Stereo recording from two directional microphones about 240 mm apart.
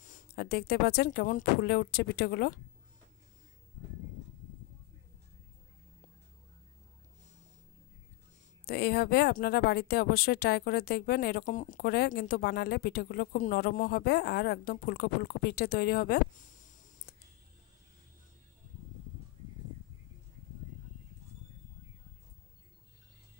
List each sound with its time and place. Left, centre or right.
0.0 s speech: left
8.6 s speech: left